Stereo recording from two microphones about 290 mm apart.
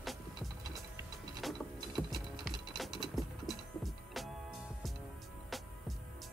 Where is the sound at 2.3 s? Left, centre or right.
Centre.